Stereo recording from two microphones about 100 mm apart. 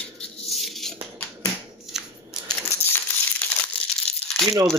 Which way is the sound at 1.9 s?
5° right (ahead or behind).